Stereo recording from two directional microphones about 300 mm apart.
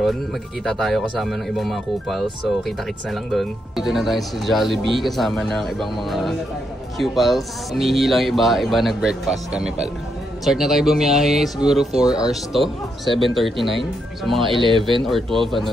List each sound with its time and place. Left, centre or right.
0.7 s speech: centre
14.6 s speech: centre
15.0 s speech: centre